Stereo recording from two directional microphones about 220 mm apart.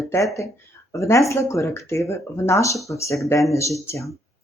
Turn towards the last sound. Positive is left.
turn(degrees=15)  # may be behind; listen again after turning